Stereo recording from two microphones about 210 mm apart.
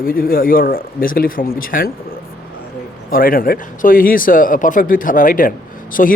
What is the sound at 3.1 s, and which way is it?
A man's voice, 45° left (ahead or behind).